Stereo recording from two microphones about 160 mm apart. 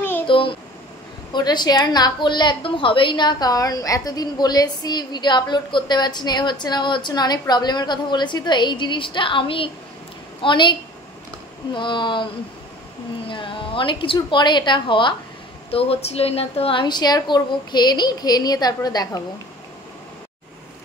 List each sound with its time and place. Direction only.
0.3 s a sound: 30° left (ahead or behind)
1.3 s a woman's voice: 25° left (ahead or behind)
13.3 s a woman's voice: 30° left (ahead or behind)